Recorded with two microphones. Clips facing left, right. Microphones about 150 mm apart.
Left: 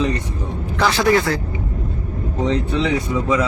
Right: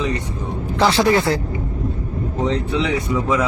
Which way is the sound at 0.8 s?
25° right (ahead or behind).